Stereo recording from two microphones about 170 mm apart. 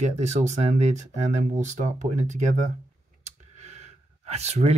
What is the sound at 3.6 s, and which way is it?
Sigh, 40° right (ahead or behind).